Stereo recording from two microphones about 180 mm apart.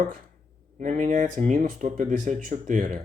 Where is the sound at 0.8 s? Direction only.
40° right (ahead or behind).